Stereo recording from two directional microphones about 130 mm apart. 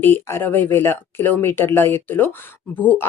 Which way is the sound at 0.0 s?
15° left (ahead or behind).